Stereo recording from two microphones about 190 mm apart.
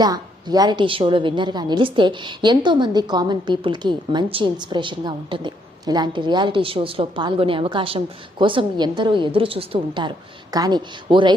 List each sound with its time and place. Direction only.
0.0 s a woman's voice: 20° right (ahead or behind)